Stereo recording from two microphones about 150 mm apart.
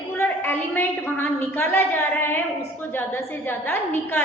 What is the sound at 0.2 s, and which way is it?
A woman's voice, 15° left (ahead or behind).